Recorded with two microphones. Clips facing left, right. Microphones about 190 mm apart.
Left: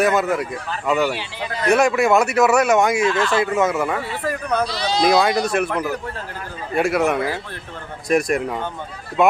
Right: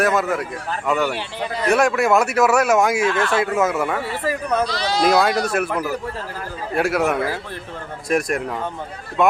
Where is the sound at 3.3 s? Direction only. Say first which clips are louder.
Left 1 dB; centre (ahead or behind).